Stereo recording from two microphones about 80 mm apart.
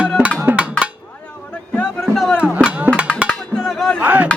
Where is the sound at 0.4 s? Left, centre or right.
Centre.